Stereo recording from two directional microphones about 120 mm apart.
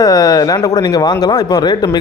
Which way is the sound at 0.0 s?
30° left (ahead or behind).